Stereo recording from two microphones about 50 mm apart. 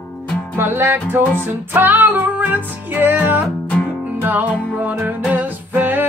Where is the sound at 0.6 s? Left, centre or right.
Right.